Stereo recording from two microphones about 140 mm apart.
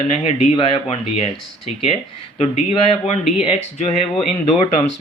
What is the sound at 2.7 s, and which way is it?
Speech, 40° left (ahead or behind).